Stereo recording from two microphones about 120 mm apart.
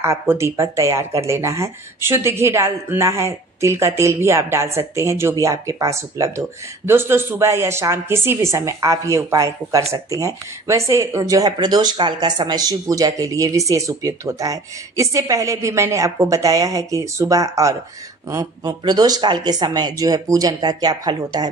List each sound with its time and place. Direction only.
0.0 s speech: 25° right (ahead or behind)